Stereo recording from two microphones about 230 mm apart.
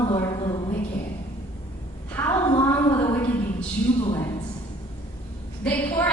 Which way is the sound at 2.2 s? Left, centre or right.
Centre.